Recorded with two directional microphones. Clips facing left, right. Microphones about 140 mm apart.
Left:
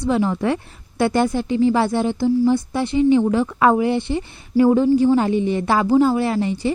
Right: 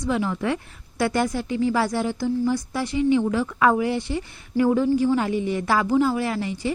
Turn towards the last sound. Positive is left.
turn(degrees=30)  # may be behind; listen again after turning